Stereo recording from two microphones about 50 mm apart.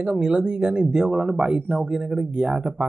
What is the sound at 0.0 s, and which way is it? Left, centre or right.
Speech, centre.